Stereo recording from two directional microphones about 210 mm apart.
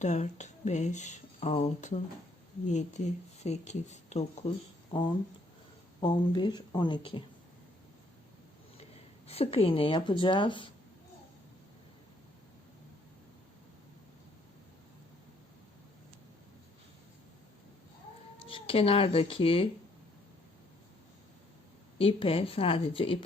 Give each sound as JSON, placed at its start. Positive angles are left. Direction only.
{"t": 0.0, "sound": "speech", "side_deg": 35}
{"t": 6.0, "sound": "a woman's voice", "side_deg": 20}
{"t": 8.8, "sound": "speech", "side_deg": 30}
{"t": 18.4, "sound": "speech", "side_deg": 25}
{"t": 21.9, "sound": "a woman's voice", "side_deg": 25}